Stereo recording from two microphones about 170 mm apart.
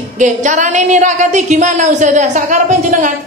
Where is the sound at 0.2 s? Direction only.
45° right (ahead or behind).